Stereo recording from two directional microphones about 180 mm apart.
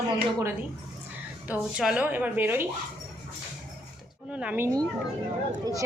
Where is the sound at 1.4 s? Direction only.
5° right (ahead or behind).